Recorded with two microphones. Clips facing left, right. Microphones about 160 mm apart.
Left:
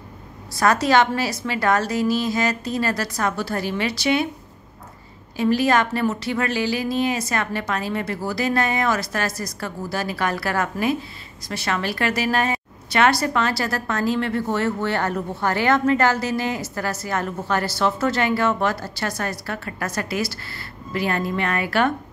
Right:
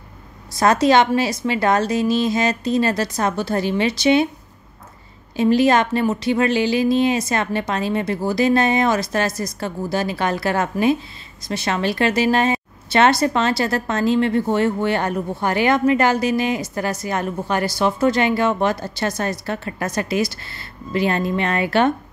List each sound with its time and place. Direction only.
0.6 s a woman's voice: 20° right (ahead or behind)
5.3 s a woman's voice: 20° right (ahead or behind)